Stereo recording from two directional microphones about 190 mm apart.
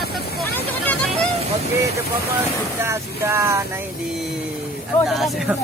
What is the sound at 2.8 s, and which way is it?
Speech, 15° right (ahead or behind).